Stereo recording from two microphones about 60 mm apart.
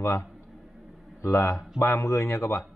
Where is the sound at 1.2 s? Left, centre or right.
Left.